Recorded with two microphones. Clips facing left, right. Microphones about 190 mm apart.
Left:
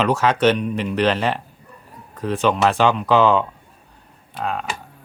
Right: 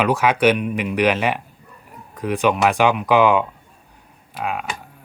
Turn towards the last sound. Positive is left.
turn(degrees=-10)  # may be behind; listen again after turning